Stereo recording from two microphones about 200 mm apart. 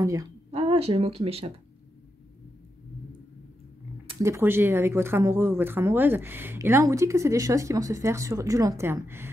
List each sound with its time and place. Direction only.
0.0 s speech: 15° right (ahead or behind)
0.5 s speech: 30° right (ahead or behind)
4.2 s speech: 15° right (ahead or behind)